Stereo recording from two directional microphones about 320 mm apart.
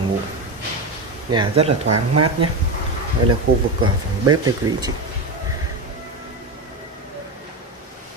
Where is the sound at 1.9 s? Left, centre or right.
Right.